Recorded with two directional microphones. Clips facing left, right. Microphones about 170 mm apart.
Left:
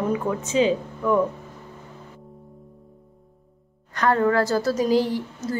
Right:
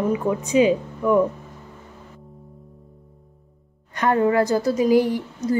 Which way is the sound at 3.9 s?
20° right (ahead or behind).